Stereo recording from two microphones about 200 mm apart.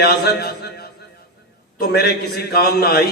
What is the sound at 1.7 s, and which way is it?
Music, 50° left (ahead or behind).